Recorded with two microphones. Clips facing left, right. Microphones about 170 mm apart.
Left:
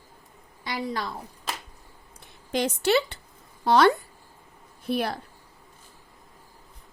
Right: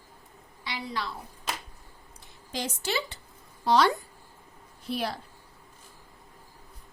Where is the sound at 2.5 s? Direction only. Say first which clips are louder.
Left 9 dB; 65° left (ahead or behind).